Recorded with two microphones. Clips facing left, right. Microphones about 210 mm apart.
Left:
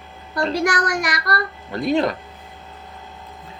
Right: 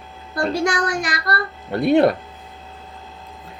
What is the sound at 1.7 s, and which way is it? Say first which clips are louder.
Speech: right 5 dB; 60° right (ahead or behind).